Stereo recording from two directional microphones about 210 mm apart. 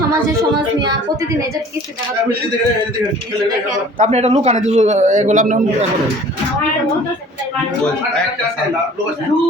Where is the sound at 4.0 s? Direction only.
30° right (ahead or behind).